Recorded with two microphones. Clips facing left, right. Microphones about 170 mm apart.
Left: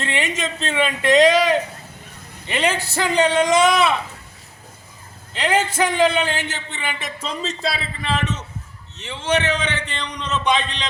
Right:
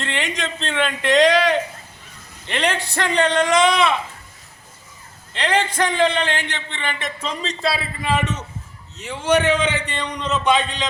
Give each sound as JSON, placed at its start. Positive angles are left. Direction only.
{"t": 0.0, "sound": "a man's voice", "side_deg": 10}
{"t": 5.3, "sound": "a man's voice", "side_deg": 5}
{"t": 9.0, "sound": "a man's voice", "side_deg": -10}